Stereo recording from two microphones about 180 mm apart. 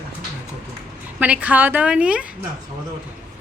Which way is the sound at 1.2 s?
10° right (ahead or behind).